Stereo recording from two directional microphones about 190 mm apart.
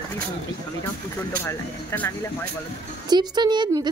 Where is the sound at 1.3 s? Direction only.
10° left (ahead or behind).